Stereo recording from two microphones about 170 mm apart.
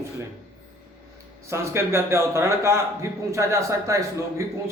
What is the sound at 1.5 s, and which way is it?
A man's voice, 15° right (ahead or behind).